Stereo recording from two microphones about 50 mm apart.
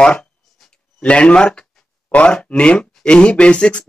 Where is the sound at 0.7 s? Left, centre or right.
Left.